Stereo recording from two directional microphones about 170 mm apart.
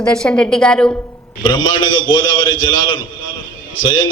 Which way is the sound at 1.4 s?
25° left (ahead or behind).